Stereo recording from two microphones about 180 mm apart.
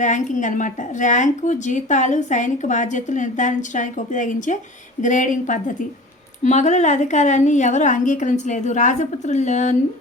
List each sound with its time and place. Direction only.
0.0 s a woman's voice: 45° left (ahead or behind)